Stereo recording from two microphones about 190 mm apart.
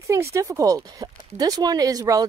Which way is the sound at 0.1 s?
15° right (ahead or behind).